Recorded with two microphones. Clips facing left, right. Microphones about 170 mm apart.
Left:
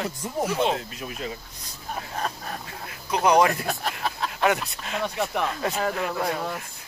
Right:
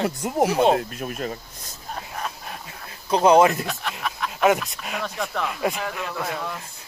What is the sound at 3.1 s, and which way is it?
Speech, 25° right (ahead or behind).